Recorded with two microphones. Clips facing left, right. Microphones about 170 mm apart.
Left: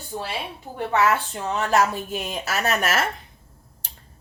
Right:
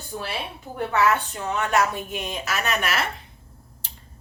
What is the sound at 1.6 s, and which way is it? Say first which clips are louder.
A woman's voice: left 2 dB; 35° left (ahead or behind).